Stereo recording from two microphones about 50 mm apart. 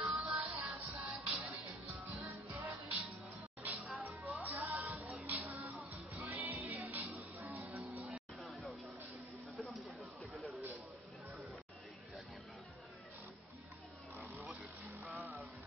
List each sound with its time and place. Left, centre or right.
0.0 s music: right
8.4 s a sound: centre
14.1 s vehicle: right